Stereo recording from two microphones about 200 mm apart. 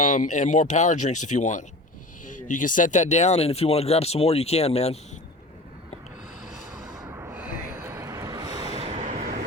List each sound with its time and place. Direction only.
0.0 s speech: 40° left (ahead or behind)
6.9 s a sound: 15° right (ahead or behind)
8.8 s train: 35° right (ahead or behind)